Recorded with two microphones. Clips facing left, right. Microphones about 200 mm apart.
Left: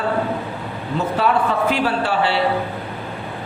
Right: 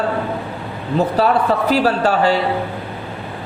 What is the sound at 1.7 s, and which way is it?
Speech, 40° right (ahead or behind).